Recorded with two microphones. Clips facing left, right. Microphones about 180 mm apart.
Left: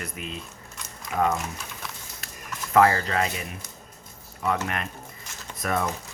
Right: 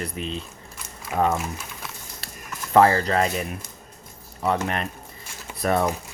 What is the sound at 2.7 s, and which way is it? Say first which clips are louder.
Speech: right 3 dB; 30° right (ahead or behind).